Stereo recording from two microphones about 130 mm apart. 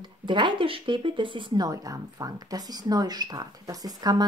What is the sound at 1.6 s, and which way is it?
Speech, 25° right (ahead or behind).